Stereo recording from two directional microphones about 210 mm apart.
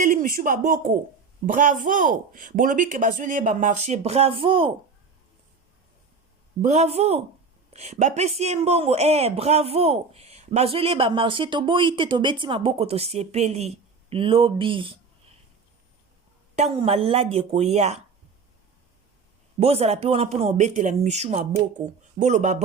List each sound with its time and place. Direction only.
0.0 s speech: 40° right (ahead or behind)
6.6 s speech: 35° right (ahead or behind)
16.6 s speech: 30° right (ahead or behind)
19.5 s speech: 30° right (ahead or behind)